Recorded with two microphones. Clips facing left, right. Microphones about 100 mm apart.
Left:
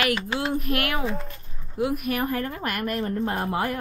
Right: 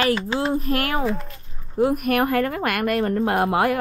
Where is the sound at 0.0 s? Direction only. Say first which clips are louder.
Right 4 dB; 30° right (ahead or behind).